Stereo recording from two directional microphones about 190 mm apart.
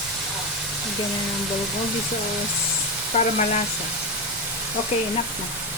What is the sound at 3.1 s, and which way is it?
Speech, 40° left (ahead or behind).